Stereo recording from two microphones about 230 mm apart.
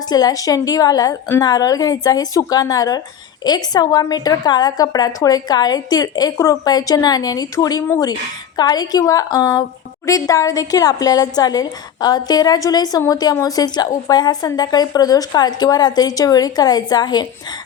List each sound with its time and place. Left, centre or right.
0.0 s a woman's voice: centre